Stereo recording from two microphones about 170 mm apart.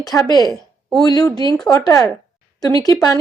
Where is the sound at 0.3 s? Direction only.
25° left (ahead or behind).